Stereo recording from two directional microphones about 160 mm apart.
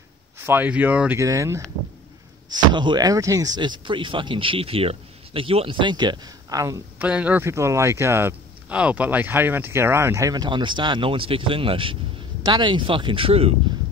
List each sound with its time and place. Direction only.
0.5 s a man's voice: 10° right (ahead or behind)
2.7 s speech: 30° right (ahead or behind)
7.0 s a man's voice: 10° right (ahead or behind); by 13.6 s 40° right (ahead or behind)